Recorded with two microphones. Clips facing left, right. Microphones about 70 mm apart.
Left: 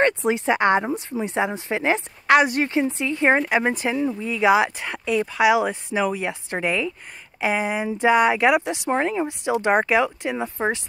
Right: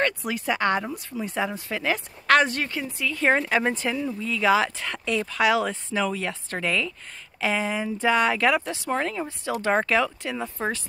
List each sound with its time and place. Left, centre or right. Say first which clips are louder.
0.0 s speech: left 6 dB; left
2.2 s speech: left 3 dB; centre